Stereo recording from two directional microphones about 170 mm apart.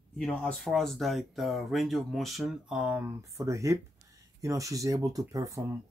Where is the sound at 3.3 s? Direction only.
20° right (ahead or behind).